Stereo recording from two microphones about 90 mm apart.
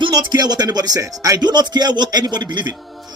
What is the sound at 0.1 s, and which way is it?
A man's voice, 50° right (ahead or behind).